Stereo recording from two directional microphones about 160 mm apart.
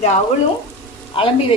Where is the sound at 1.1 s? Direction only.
30° left (ahead or behind).